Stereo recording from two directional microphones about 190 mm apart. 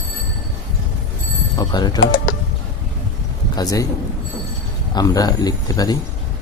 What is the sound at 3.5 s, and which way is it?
Speech, 15° left (ahead or behind).